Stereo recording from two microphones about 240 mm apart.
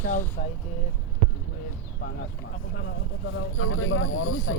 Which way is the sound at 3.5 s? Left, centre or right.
Left.